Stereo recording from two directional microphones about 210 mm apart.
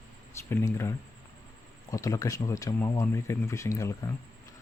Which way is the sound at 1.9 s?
15° left (ahead or behind).